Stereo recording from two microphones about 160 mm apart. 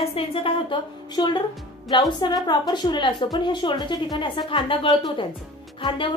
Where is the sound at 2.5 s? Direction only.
30° left (ahead or behind).